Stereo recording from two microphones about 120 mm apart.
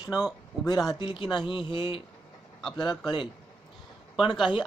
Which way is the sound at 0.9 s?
40° left (ahead or behind).